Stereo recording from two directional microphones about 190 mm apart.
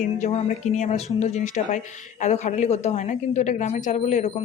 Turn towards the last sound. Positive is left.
turn(degrees=40)  # may be behind; listen again after turning